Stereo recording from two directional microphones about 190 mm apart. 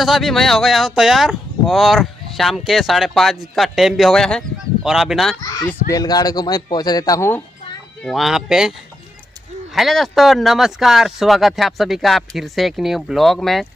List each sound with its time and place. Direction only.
0.0 s speech: centre (ahead or behind)
5.4 s speech: 20° left (ahead or behind)
8.0 s speech: centre (ahead or behind)
9.8 s speech: centre (ahead or behind)